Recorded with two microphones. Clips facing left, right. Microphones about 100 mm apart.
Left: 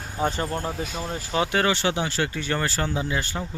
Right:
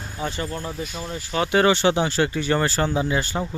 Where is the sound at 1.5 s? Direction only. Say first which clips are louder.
Right 9 dB; 20° right (ahead or behind).